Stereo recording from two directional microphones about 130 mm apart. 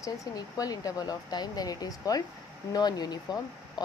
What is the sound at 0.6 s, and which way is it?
A woman's voice, 30° left (ahead or behind).